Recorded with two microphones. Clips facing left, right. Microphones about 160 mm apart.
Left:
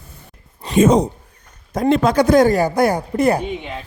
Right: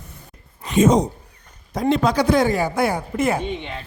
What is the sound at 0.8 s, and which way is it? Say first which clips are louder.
Speech: left 2 dB; 60° left (ahead or behind).